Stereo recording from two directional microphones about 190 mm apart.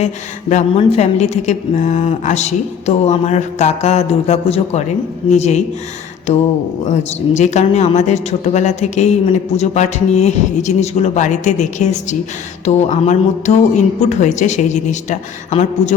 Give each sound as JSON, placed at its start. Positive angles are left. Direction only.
{"t": 0.0, "sound": "speech", "side_deg": 35}
{"t": 6.9, "sound": "speech", "side_deg": 40}